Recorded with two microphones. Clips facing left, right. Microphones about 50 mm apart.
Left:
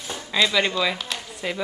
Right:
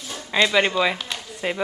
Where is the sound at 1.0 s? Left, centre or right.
Centre.